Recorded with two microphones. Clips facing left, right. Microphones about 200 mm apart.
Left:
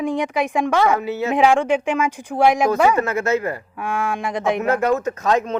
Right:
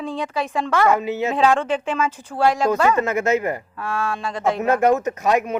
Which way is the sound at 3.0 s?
20° right (ahead or behind).